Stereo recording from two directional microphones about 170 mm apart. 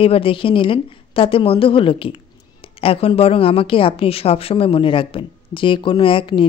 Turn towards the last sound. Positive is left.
turn(degrees=30)  # may be behind; listen again after turning